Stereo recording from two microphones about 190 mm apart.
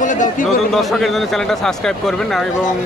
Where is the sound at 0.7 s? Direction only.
Centre (ahead or behind).